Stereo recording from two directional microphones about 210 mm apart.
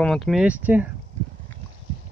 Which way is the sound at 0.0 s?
Centre (ahead or behind).